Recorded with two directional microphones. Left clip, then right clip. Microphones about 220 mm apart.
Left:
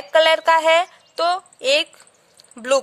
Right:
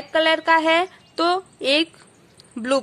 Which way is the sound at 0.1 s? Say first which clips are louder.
Left 3 dB; 35° left (ahead or behind).